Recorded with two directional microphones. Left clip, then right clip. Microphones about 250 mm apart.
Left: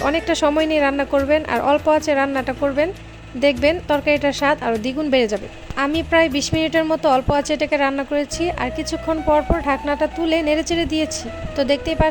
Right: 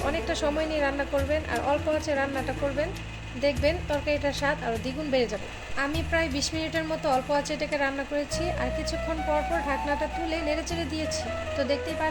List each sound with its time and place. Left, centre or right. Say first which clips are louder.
0.0 s a woman's voice: left 10 dB; left